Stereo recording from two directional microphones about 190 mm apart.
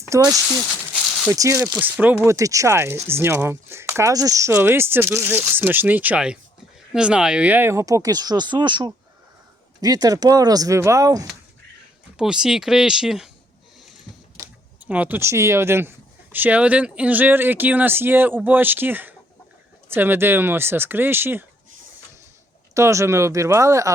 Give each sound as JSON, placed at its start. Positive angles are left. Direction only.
{"t": 0.1, "sound": "speech", "side_deg": -20}
{"t": 12.1, "sound": "speech", "side_deg": -5}
{"t": 14.3, "sound": "speech", "side_deg": -10}
{"t": 22.7, "sound": "speech", "side_deg": -15}